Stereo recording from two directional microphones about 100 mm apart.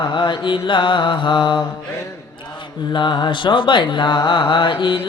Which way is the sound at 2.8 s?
50° left (ahead or behind).